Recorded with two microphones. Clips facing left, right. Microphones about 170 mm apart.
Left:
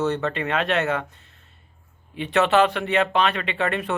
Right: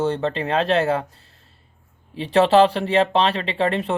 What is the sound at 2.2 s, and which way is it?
Speech, 30° right (ahead or behind).